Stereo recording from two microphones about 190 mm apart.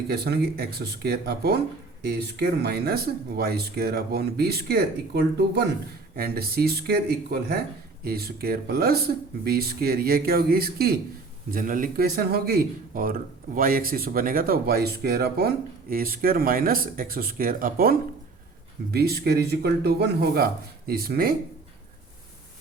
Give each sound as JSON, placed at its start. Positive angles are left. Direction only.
{"t": 0.1, "sound": "speech", "side_deg": -55}